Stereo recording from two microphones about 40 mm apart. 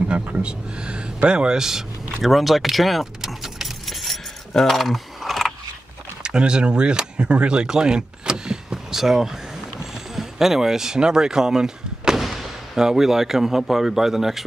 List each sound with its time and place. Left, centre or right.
0.4 s speech: right
2.2 s speech: centre
3.8 s keys jangling: centre
6.2 s speech: right
9.8 s a sound: centre
12.2 s artillery fire: centre
12.8 s speech: centre